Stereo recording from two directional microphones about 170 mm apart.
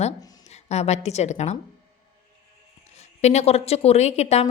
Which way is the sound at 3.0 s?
40° left (ahead or behind).